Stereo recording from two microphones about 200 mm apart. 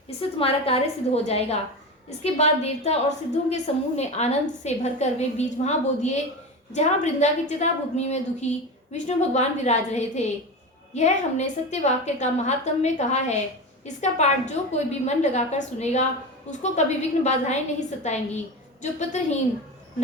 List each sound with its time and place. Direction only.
0.2 s a woman's voice: 30° left (ahead or behind)